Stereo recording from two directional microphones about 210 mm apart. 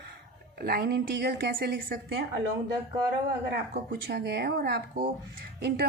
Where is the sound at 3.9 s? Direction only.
50° right (ahead or behind).